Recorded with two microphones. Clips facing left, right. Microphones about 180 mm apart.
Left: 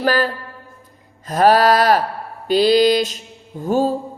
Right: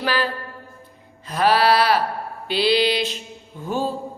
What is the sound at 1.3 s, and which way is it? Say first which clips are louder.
Music: left 4 dB; 45° left (ahead or behind).